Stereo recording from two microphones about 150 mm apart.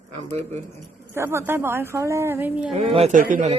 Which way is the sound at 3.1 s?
65° right (ahead or behind).